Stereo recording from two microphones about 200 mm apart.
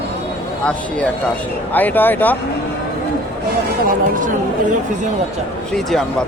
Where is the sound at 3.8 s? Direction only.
40° right (ahead or behind).